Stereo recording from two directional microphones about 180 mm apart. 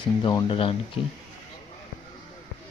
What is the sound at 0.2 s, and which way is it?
Speech, 25° left (ahead or behind).